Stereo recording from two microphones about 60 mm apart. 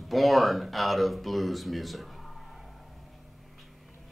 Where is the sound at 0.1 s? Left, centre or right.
Centre.